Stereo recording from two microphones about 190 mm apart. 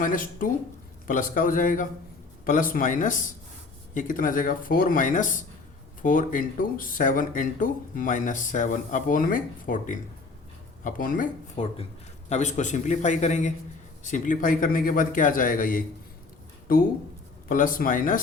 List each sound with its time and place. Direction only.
0.0 s speech: 45° left (ahead or behind)
11.5 s a man's voice: 30° left (ahead or behind)
17.5 s speech: 45° left (ahead or behind)